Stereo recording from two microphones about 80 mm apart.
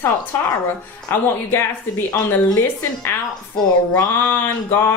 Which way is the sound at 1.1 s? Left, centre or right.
Left.